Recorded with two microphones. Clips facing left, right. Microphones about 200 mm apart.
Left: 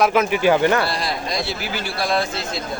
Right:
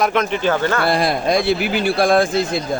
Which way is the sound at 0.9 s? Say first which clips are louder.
Right 8 dB; 55° right (ahead or behind).